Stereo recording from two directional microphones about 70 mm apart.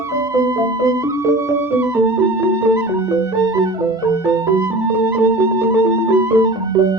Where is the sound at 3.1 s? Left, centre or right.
Right.